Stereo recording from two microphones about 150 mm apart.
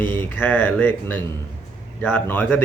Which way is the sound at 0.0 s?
10° left (ahead or behind).